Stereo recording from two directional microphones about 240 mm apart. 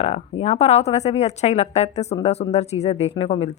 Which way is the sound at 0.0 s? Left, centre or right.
Left.